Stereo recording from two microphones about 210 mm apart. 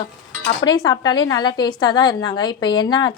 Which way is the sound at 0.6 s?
20° left (ahead or behind).